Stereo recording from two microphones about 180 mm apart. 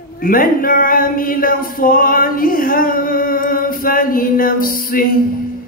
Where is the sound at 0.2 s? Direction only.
50° left (ahead or behind).